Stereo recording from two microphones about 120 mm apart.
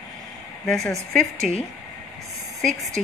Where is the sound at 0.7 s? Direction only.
5° left (ahead or behind).